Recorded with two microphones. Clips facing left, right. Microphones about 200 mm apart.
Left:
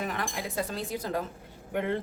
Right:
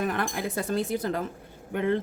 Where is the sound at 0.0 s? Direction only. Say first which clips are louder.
Right 5 dB; 55° right (ahead or behind).